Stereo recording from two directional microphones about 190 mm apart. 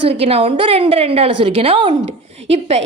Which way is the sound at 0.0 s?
30° right (ahead or behind).